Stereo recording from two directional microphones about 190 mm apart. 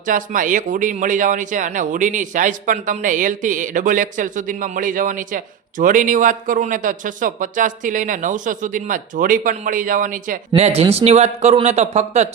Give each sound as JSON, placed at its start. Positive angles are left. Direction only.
{"t": 0.0, "sound": "speech", "side_deg": -45}
{"t": 10.5, "sound": "speech", "side_deg": -30}